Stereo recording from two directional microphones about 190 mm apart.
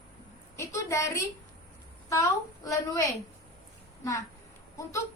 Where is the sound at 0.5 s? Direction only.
15° left (ahead or behind).